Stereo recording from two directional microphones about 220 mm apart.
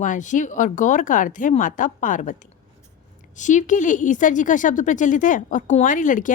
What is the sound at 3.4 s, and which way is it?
Speech, 35° left (ahead or behind).